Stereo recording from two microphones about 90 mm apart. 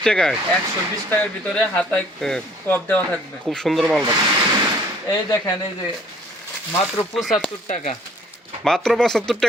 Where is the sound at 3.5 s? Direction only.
Centre (ahead or behind).